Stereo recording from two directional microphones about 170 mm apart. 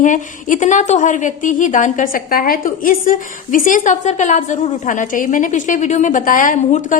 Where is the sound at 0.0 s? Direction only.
50° left (ahead or behind).